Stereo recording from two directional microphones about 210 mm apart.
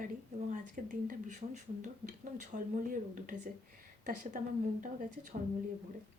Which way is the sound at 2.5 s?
40° right (ahead or behind).